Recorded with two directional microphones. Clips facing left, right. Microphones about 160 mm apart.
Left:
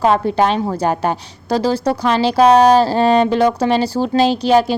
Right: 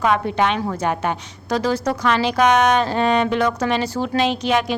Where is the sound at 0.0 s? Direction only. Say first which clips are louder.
Left 4 dB; 35° left (ahead or behind).